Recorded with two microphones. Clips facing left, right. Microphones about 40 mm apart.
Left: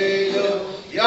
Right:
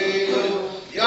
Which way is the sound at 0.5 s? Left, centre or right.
Centre.